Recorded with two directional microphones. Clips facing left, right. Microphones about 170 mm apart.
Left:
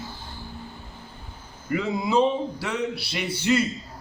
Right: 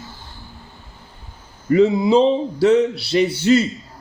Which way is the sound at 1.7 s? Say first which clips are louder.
Right 8 dB; 25° right (ahead or behind).